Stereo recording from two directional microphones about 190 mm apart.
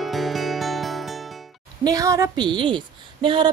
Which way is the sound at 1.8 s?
20° right (ahead or behind).